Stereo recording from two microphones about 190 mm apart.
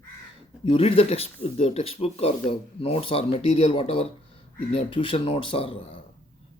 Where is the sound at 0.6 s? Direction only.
30° left (ahead or behind).